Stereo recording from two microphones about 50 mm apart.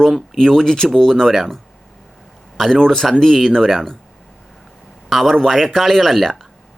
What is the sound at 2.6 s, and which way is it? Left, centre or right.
Speech, centre.